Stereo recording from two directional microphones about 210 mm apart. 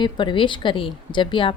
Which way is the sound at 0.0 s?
20° left (ahead or behind).